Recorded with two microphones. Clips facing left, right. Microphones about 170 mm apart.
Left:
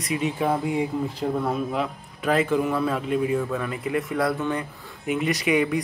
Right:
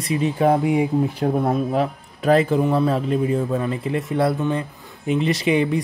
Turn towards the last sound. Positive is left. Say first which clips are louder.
# right 3 dB
turn(degrees=-30)  # may be behind; listen again after turning